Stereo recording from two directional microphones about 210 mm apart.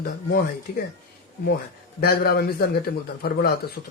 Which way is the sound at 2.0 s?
45° left (ahead or behind).